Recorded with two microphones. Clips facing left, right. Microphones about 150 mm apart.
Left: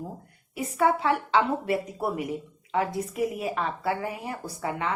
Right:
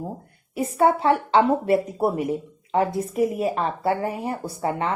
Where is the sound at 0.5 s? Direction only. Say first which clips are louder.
Right 4 dB; 30° right (ahead or behind).